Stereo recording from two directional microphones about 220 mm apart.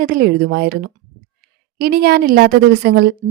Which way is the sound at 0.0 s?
40° right (ahead or behind).